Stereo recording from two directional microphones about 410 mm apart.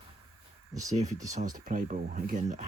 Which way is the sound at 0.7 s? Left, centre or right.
Centre.